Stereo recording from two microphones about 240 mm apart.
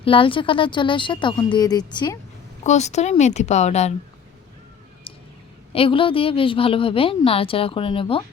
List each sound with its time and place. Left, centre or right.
0.0 s a woman's voice: left
5.1 s a sound: left
5.7 s a woman's voice: left